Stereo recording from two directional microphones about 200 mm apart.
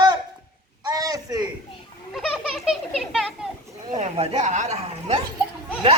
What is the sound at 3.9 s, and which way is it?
Speech, 35° right (ahead or behind).